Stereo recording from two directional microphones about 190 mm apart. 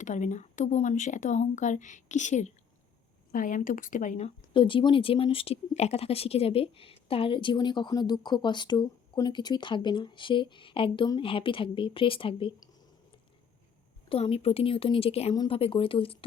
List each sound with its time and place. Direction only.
0.0 s speech: 40° left (ahead or behind)
4.5 s speech: 25° left (ahead or behind)
14.1 s speech: 30° left (ahead or behind)